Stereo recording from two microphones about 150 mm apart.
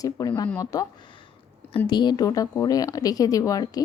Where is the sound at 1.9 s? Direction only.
30° left (ahead or behind).